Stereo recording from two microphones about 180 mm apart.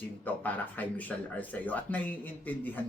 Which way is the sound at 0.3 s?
10° left (ahead or behind).